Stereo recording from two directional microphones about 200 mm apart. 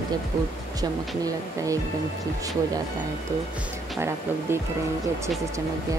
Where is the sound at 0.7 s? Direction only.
15° right (ahead or behind).